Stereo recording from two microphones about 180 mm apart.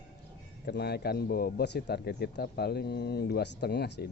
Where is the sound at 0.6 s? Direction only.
65° left (ahead or behind).